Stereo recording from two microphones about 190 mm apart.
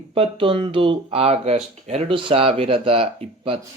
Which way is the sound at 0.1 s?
30° right (ahead or behind).